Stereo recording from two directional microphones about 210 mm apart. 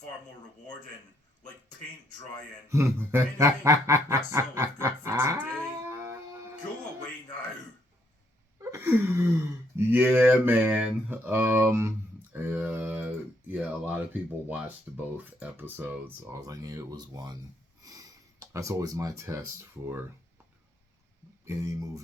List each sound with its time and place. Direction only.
2.6 s speech: 15° right (ahead or behind)
5.9 s music: 10° right (ahead or behind)
8.5 s speech: 10° right (ahead or behind)
21.4 s speech: 15° right (ahead or behind)